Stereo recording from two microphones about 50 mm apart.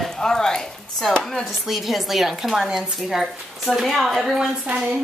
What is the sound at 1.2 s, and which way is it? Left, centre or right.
Speech, centre.